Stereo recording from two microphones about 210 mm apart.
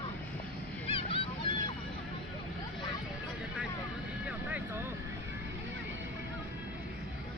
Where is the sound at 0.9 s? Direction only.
25° left (ahead or behind).